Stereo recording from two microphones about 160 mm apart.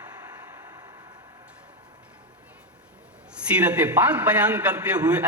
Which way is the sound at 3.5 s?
10° right (ahead or behind).